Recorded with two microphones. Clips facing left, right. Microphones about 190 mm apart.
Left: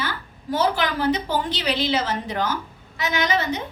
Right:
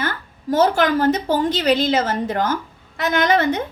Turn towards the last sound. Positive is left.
turn(degrees=-55)  # may be behind; listen again after turning